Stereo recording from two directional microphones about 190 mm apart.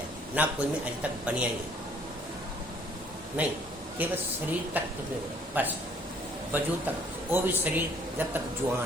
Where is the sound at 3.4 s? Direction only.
10° right (ahead or behind).